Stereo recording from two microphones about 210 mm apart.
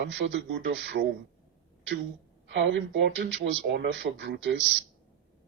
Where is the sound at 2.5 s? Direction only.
60° right (ahead or behind).